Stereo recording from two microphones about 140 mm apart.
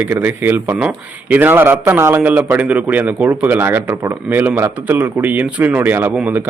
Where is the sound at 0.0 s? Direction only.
15° right (ahead or behind).